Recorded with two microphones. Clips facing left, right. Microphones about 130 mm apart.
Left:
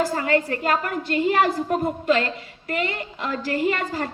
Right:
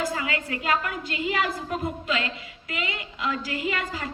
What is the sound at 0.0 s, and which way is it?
A woman's voice, 45° left (ahead or behind).